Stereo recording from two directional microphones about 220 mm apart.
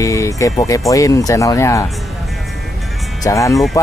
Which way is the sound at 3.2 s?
15° left (ahead or behind).